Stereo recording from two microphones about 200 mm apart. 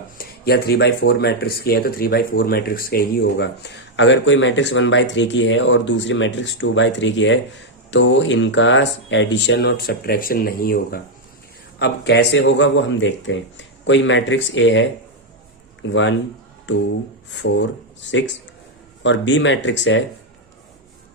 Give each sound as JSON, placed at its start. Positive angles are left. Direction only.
{"t": 0.2, "sound": "speech", "side_deg": 55}
{"t": 11.8, "sound": "speech", "side_deg": 60}